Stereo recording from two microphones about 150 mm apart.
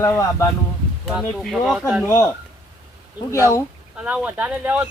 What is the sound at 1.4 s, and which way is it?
Speech, centre (ahead or behind).